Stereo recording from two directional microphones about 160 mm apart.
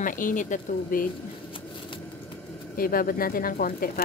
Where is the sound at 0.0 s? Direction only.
60° left (ahead or behind).